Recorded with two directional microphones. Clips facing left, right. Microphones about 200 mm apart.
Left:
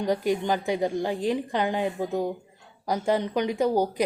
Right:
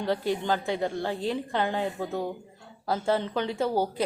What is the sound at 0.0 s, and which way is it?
A woman's voice, 15° left (ahead or behind).